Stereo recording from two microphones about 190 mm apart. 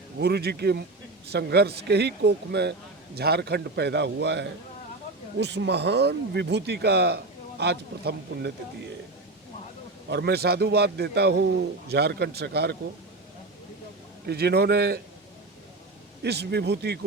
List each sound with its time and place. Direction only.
0.2 s speech: 60° right (ahead or behind)
10.1 s speech: 60° right (ahead or behind)
14.3 s speech: 55° right (ahead or behind)
16.2 s speech: 60° right (ahead or behind)